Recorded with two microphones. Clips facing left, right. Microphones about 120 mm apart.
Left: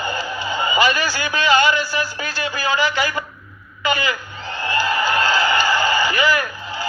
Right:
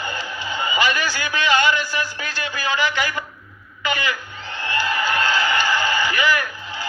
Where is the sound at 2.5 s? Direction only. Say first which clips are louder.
Left 2 dB; 40° left (ahead or behind).